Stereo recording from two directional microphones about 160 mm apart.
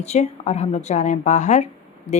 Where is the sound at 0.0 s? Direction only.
45° left (ahead or behind).